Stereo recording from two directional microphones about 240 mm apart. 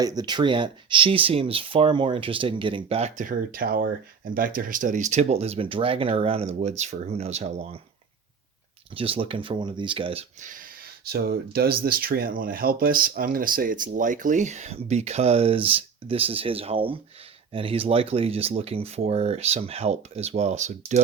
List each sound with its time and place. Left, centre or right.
0.0 s speech: centre
9.0 s speech: right
11.0 s speech: right